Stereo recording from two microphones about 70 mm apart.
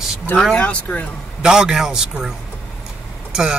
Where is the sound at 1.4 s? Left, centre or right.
Centre.